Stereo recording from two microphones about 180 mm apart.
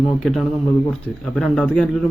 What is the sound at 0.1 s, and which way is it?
Speech, centre (ahead or behind).